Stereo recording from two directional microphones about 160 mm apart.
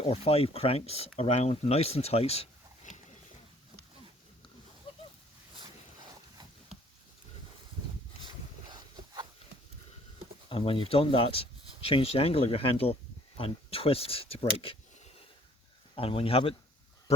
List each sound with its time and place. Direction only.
0.0 s speech: 40° left (ahead or behind)
10.5 s speech: 35° left (ahead or behind)
16.0 s speech: 35° left (ahead or behind)